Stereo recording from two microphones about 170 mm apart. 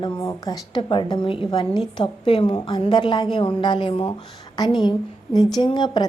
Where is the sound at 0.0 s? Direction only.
25° left (ahead or behind).